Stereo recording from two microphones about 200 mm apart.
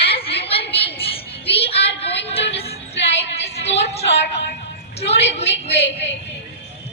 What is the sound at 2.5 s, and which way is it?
Music, 30° left (ahead or behind).